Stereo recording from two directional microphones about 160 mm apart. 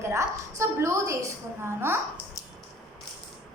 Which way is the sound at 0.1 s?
15° right (ahead or behind).